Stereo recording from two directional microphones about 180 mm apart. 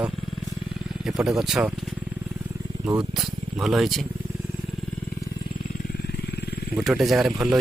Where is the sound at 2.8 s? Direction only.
5° right (ahead or behind).